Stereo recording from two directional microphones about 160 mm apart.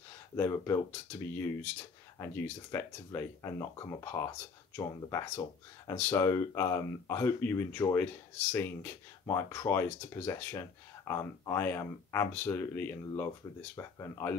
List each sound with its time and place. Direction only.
0.4 s speech: 15° left (ahead or behind)